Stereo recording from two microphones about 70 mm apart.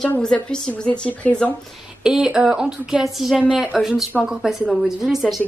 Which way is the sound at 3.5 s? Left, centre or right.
Centre.